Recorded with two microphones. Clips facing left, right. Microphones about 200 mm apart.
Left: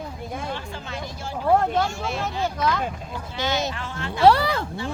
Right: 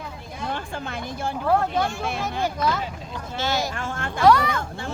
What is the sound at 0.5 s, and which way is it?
Speech, 55° right (ahead or behind).